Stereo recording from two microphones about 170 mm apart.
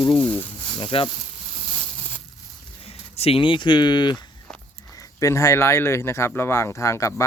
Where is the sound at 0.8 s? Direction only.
30° left (ahead or behind).